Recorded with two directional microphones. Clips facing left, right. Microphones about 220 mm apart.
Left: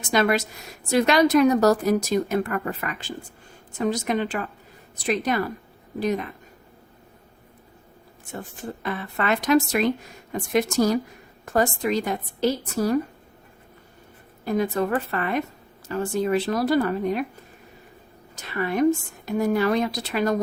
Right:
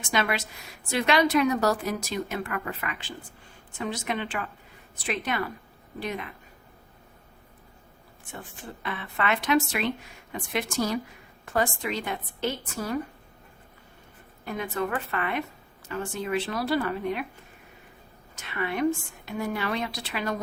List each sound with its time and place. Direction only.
0.0 s a woman's voice: 40° left (ahead or behind)
8.3 s a woman's voice: 40° left (ahead or behind)
14.4 s a woman's voice: 35° left (ahead or behind)
18.3 s a woman's voice: 40° left (ahead or behind)